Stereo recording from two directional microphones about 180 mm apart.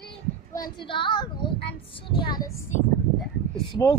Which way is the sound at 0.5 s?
25° left (ahead or behind).